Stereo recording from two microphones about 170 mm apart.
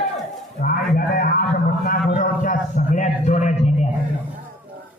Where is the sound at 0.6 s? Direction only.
55° left (ahead or behind).